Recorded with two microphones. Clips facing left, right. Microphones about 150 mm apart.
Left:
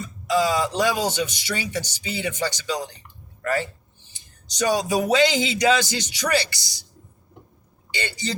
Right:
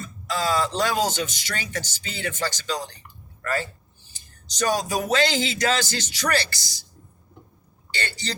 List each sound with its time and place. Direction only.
0.0 s a man's voice: 15° left (ahead or behind)
7.9 s speech: 15° left (ahead or behind)